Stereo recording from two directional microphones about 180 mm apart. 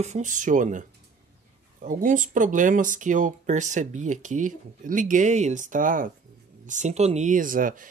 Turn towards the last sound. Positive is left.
turn(degrees=-50)  # may be behind; listen again after turning